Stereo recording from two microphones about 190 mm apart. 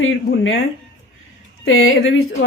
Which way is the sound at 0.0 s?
90° left.